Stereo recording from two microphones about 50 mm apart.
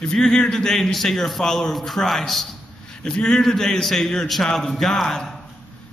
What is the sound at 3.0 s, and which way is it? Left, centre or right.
A man's voice, centre.